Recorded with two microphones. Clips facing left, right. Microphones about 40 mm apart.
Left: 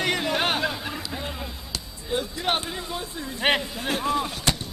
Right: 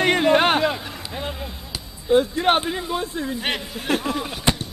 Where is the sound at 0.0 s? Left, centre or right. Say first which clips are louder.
Right 8 dB; right.